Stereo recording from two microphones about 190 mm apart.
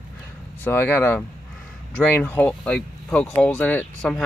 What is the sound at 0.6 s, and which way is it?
Speech, 10° left (ahead or behind).